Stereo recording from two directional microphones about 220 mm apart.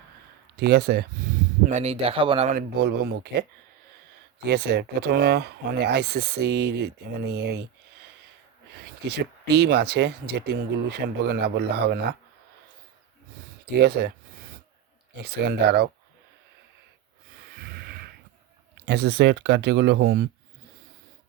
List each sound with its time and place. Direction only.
0.5 s speech: 45° right (ahead or behind)
1.6 s speech: 30° right (ahead or behind)
2.6 s speech: 45° right (ahead or behind)
4.4 s speech: 45° right (ahead or behind)
9.0 s speech: 50° right (ahead or behind)
13.7 s speech: 45° right (ahead or behind)
15.1 s speech: 45° right (ahead or behind)
18.9 s speech: 50° right (ahead or behind)